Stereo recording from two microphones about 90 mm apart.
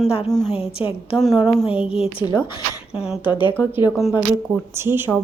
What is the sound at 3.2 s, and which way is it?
Speech, 65° left (ahead or behind).